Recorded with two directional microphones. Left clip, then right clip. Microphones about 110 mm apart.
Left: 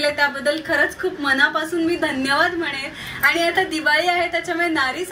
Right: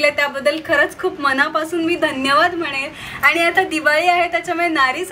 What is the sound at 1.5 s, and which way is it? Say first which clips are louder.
A woman's voice: right 2 dB; 15° right (ahead or behind).